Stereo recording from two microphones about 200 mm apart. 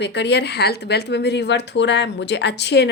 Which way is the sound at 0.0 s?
60° left (ahead or behind).